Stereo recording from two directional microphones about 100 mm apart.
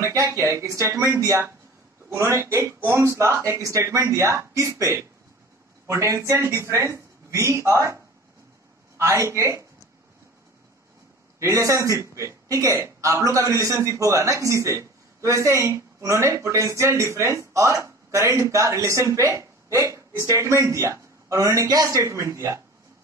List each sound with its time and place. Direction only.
0.0 s a woman's voice: 35° right (ahead or behind)
11.3 s speech: 30° right (ahead or behind)